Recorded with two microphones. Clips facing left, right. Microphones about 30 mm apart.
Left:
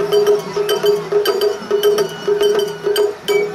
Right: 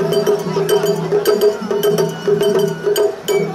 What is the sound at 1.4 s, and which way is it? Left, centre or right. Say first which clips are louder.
Music: right 1 dB; left.